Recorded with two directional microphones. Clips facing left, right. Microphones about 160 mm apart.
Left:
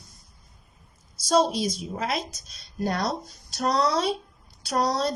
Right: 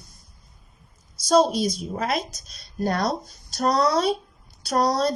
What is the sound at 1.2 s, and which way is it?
A woman's voice, 40° right (ahead or behind).